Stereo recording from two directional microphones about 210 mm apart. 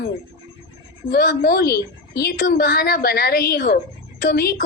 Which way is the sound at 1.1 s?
45° left (ahead or behind).